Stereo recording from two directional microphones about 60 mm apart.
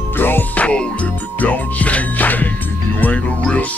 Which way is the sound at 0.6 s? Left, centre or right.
Left.